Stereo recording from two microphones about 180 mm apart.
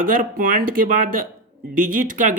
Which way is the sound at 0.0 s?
50° right (ahead or behind).